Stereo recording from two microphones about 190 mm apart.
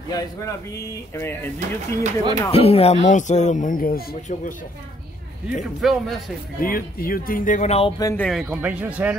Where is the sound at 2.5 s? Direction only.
30° left (ahead or behind); by 4.5 s 50° left (ahead or behind).